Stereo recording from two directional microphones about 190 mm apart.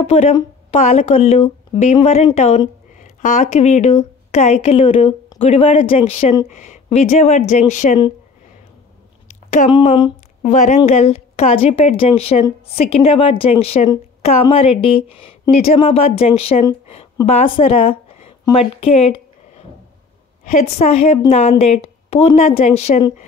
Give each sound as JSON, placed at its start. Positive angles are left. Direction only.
{"t": 0.0, "sound": "speech", "side_deg": 30}
{"t": 9.3, "sound": "a sound", "side_deg": 40}
{"t": 9.7, "sound": "speech", "side_deg": 25}
{"t": 10.4, "sound": "speech", "side_deg": 40}
{"t": 16.8, "sound": "a sound", "side_deg": 30}
{"t": 17.3, "sound": "a woman's voice", "side_deg": 30}
{"t": 20.6, "sound": "speech", "side_deg": 35}